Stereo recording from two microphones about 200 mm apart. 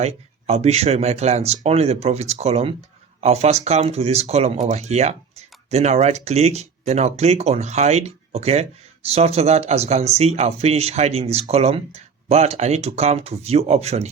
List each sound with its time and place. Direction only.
0.0 s speech: 30° right (ahead or behind)